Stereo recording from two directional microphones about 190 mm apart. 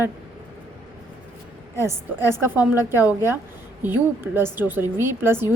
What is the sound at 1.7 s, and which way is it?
Speech, 15° right (ahead or behind).